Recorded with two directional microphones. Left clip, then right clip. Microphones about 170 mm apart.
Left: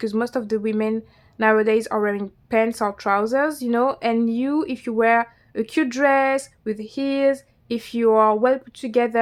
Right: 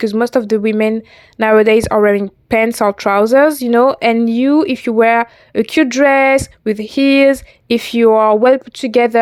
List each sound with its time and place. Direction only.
0.0 s speech: 40° right (ahead or behind)